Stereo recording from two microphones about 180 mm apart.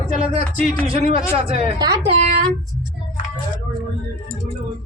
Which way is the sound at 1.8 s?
25° right (ahead or behind).